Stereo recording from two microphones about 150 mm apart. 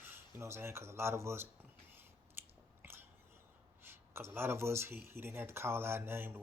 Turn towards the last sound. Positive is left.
turn(degrees=-15)  # may be behind; listen again after turning